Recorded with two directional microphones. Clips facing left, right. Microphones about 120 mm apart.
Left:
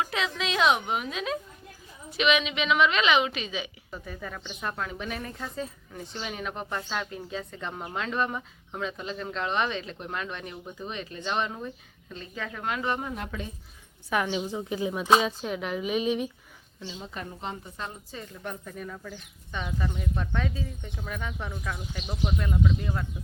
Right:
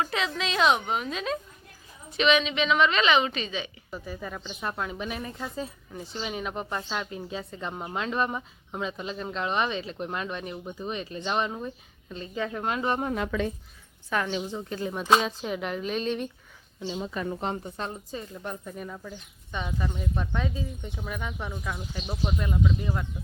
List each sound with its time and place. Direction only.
0.3 s a woman's voice: centre (ahead or behind)
4.6 s speech: 15° right (ahead or behind)
6.1 s a woman's voice: 20° right (ahead or behind)
12.1 s a woman's voice: 25° right (ahead or behind)
14.1 s speech: 10° left (ahead or behind)
17.6 s a woman's voice: 30° right (ahead or behind)
18.1 s speech: 15° right (ahead or behind)